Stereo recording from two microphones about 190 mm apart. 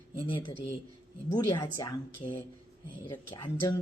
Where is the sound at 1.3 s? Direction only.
25° left (ahead or behind).